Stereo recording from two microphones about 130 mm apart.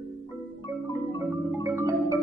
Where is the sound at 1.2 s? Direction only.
20° right (ahead or behind).